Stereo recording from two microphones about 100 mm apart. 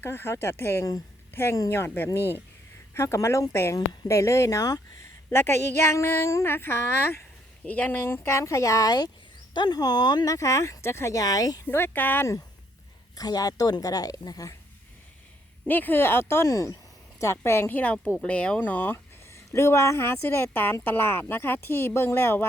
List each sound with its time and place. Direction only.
0.0 s speech: 25° left (ahead or behind)
2.9 s speech: 30° left (ahead or behind)
5.3 s speech: 25° left (ahead or behind); by 10.3 s 45° left (ahead or behind)
10.3 s speech: 30° left (ahead or behind)
11.7 s speech: 20° left (ahead or behind)
13.1 s speech: 40° left (ahead or behind)
15.6 s speech: 20° left (ahead or behind)
19.3 s speech: 30° left (ahead or behind)